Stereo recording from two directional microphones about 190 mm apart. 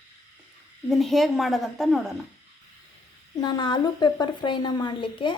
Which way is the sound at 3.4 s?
20° left (ahead or behind).